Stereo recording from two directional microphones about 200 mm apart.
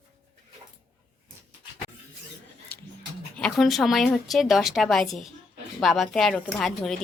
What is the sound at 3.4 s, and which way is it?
A woman's voice, centre (ahead or behind).